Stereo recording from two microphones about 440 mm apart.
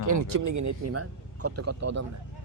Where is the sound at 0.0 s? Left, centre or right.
Right.